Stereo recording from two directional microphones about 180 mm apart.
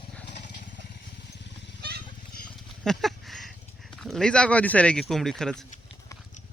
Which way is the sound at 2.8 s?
Centre (ahead or behind).